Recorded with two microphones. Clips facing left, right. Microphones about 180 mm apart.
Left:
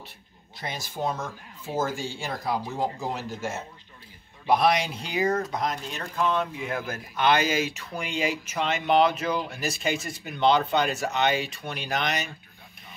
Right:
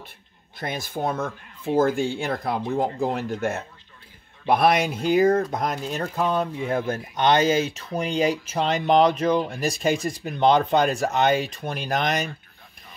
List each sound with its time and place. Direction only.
0.6 s speech: 55° right (ahead or behind); by 9.1 s 40° right (ahead or behind)
10.2 s speech: 45° right (ahead or behind)